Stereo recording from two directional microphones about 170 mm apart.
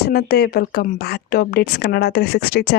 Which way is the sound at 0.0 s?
65° left (ahead or behind).